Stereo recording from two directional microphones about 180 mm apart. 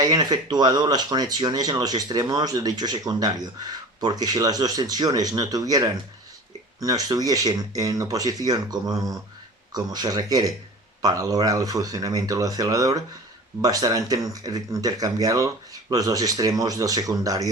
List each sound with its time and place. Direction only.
0.0 s speech: 20° right (ahead or behind)